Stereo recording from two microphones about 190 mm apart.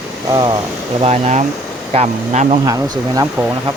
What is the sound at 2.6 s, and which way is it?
Speech, 20° right (ahead or behind).